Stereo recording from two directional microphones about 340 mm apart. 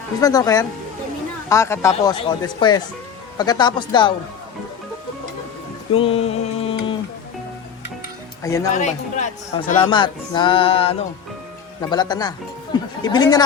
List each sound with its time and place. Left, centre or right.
0.2 s speech: centre
5.9 s a sound: centre
8.4 s speech: centre
8.7 s speech: left